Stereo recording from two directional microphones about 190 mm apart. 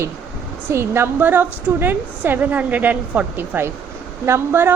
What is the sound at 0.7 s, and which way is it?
A woman's voice, 15° right (ahead or behind).